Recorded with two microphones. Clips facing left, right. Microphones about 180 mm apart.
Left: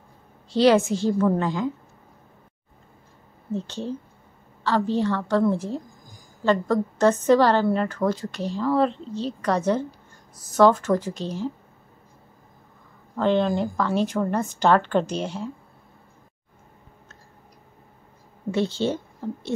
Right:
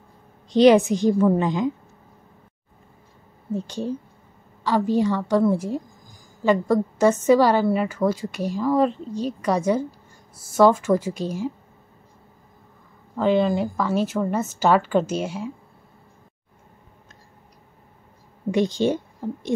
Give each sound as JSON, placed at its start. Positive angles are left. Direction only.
{"t": 0.5, "sound": "a woman's voice", "side_deg": -15}
{"t": 3.5, "sound": "a woman's voice", "side_deg": -10}
{"t": 13.1, "sound": "a woman's voice", "side_deg": -5}
{"t": 18.5, "sound": "a woman's voice", "side_deg": -15}